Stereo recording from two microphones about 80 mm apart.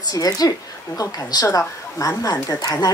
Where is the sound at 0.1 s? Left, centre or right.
Left.